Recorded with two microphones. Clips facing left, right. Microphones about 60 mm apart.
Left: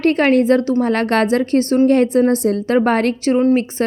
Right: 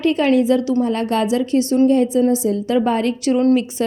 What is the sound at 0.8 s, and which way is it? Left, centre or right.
Speech, left.